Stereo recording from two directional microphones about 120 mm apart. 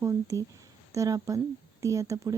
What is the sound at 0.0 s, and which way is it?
Speech, 25° right (ahead or behind).